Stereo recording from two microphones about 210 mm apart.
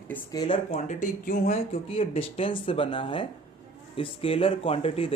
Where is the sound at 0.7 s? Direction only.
35° left (ahead or behind).